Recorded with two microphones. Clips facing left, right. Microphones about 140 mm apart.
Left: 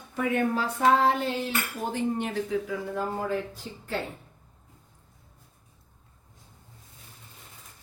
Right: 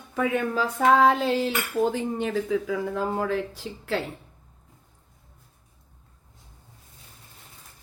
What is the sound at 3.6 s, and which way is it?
Speech, 75° right (ahead or behind).